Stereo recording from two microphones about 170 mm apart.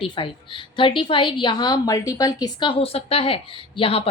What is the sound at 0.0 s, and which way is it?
A woman's voice, 30° left (ahead or behind).